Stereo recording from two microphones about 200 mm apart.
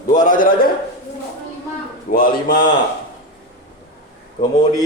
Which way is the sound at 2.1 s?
45° left (ahead or behind).